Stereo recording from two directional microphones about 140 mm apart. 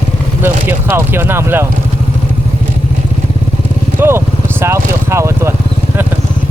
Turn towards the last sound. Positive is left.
turn(degrees=-20)  # may be behind; listen again after turning